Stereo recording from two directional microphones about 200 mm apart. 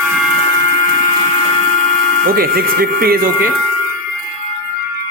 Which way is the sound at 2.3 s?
50° right (ahead or behind).